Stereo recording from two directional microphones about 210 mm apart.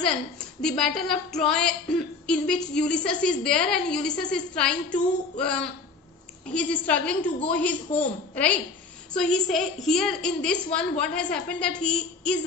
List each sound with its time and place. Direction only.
0.0 s a woman's voice: 5° left (ahead or behind)
7.2 s a woman's voice: 25° left (ahead or behind)
7.5 s a woman's voice: 5° left (ahead or behind)
9.1 s a woman's voice: 5° left (ahead or behind)